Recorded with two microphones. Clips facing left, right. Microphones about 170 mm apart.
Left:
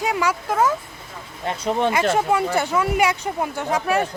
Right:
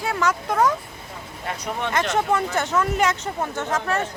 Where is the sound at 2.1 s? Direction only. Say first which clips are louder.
Left 2 dB; 10° left (ahead or behind).